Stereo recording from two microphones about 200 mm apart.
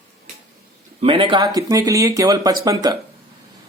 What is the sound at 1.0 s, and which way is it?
Speech, 25° right (ahead or behind).